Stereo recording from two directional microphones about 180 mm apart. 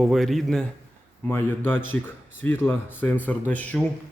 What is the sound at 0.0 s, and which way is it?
Speech, centre (ahead or behind).